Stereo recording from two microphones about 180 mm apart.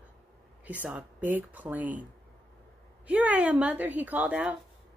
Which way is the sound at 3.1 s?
10° right (ahead or behind).